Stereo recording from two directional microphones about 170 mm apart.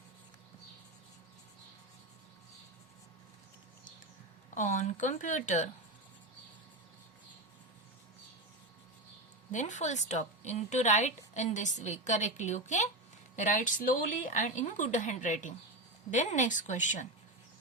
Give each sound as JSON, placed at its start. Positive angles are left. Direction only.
{"t": 4.5, "sound": "a woman's voice", "side_deg": 45}
{"t": 9.5, "sound": "a woman's voice", "side_deg": 45}